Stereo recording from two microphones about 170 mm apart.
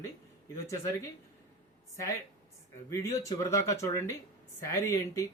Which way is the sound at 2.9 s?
20° left (ahead or behind).